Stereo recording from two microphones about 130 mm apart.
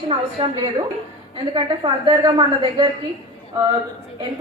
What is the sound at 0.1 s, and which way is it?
Speech, 40° right (ahead or behind).